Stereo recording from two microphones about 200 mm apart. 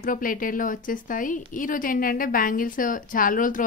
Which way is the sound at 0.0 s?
45° left (ahead or behind).